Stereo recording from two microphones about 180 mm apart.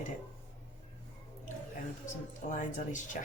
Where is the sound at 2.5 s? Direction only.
45° left (ahead or behind).